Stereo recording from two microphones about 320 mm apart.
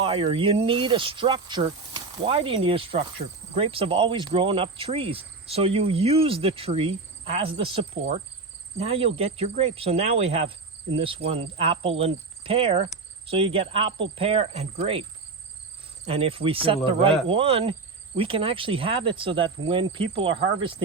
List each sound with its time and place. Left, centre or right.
0.0 s speech: centre
16.0 s speech: centre